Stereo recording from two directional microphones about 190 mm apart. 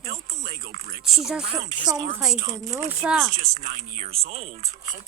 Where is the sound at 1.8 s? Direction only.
20° right (ahead or behind).